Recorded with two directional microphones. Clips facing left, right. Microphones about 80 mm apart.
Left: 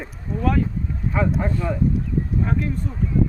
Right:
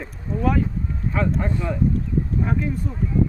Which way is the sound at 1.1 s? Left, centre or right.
Centre.